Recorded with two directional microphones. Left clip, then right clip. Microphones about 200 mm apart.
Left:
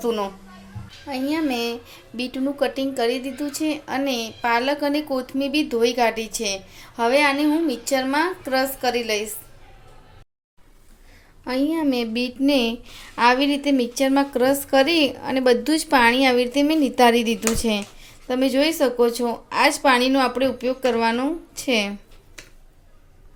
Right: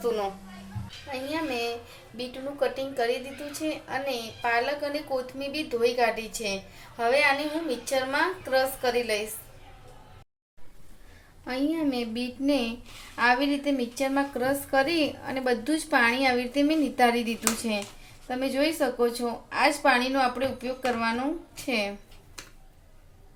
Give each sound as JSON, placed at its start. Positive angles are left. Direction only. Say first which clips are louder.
{"t": 0.0, "sound": "a woman's voice", "louder": "left 4 dB", "side_deg": 35}
{"t": 11.4, "sound": "a woman's voice", "louder": "left 6 dB", "side_deg": 40}